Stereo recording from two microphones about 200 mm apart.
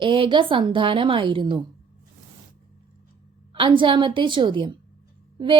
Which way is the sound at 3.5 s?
25° right (ahead or behind).